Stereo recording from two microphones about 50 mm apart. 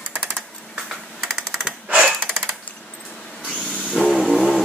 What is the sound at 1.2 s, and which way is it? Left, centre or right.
Typewriter, centre.